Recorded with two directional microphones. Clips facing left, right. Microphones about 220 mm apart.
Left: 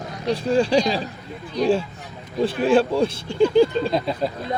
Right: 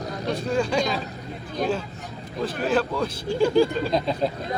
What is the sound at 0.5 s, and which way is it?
Speech, 30° left (ahead or behind).